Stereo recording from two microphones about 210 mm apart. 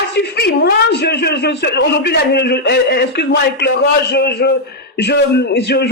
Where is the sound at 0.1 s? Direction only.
50° left (ahead or behind).